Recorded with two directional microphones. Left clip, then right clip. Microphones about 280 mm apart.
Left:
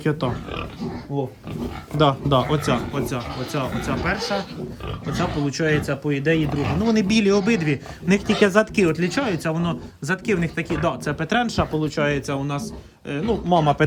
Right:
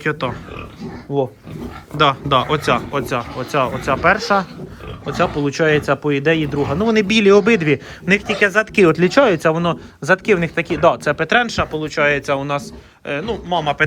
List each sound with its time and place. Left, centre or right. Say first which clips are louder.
0.0 s speech: right 3 dB; centre
1.1 s speech: right 8 dB; right
2.0 s speech: right 4 dB; centre
8.3 s speech: even; left
8.7 s speech: right 8 dB; centre